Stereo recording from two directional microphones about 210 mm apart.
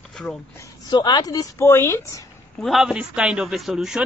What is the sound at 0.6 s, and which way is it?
Speech, 20° left (ahead or behind).